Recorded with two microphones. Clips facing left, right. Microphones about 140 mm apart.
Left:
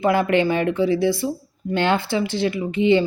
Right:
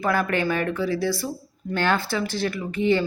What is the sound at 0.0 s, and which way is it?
Speech, 20° left (ahead or behind).